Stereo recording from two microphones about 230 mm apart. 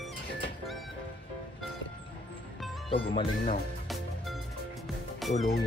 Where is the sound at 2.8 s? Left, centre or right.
Left.